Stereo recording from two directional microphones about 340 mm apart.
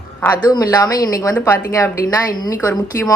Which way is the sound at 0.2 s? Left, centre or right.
Centre.